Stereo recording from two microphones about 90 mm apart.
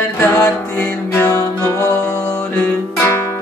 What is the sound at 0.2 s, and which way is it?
Music, 20° left (ahead or behind).